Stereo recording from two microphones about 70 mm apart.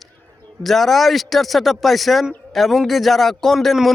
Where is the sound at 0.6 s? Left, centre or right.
Centre.